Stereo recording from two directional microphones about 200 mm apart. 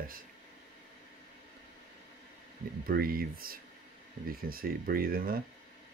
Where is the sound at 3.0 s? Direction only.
45° right (ahead or behind).